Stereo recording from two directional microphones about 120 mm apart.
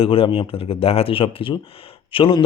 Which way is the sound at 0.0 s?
50° left (ahead or behind).